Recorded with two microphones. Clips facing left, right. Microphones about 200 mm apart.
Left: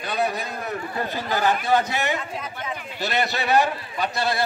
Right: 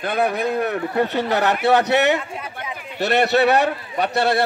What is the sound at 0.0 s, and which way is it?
A man's voice, 55° right (ahead or behind).